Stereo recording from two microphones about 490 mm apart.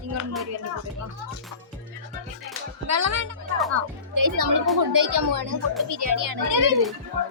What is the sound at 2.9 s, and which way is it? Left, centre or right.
A child's voice, right.